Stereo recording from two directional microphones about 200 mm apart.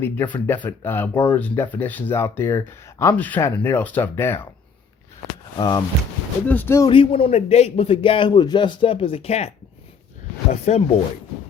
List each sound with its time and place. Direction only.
0.0 s speech: 10° left (ahead or behind)
5.5 s a man's voice: 20° left (ahead or behind)
6.5 s speech: 10° left (ahead or behind)
6.9 s a man's voice: 25° left (ahead or behind)
10.5 s speech: 35° left (ahead or behind)